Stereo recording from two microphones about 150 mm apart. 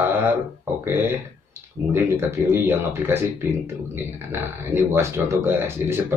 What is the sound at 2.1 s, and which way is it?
Speech, 15° right (ahead or behind).